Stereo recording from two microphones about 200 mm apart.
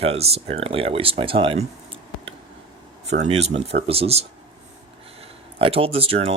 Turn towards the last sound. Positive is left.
turn(degrees=-30)  # may be behind; listen again after turning